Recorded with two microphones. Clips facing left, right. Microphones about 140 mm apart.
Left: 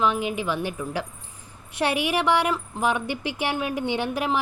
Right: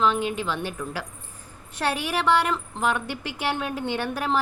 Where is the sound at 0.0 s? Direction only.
10° left (ahead or behind).